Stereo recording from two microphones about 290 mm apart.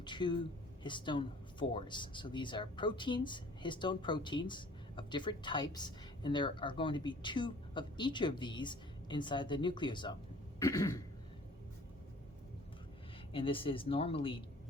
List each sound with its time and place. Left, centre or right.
0.0 s speech: centre
13.3 s speech: centre